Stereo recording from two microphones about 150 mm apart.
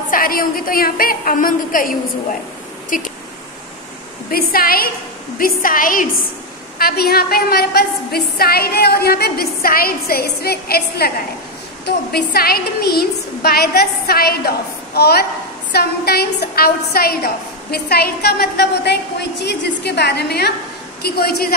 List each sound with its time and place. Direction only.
0.1 s a woman's voice: 70° left (ahead or behind)
4.3 s a woman's voice: 80° left
5.4 s a woman's voice: 70° left (ahead or behind)
6.8 s a woman's voice: 90° left